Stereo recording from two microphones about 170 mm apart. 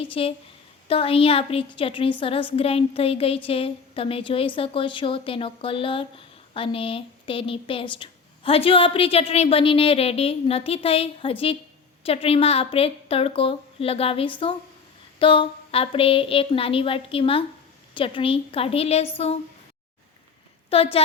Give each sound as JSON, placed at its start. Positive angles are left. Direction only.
{"t": 0.0, "sound": "a woman's voice", "side_deg": 35}
{"t": 20.7, "sound": "a woman's voice", "side_deg": 35}